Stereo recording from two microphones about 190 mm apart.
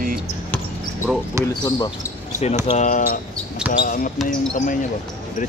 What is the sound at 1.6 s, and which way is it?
Speech, 20° left (ahead or behind).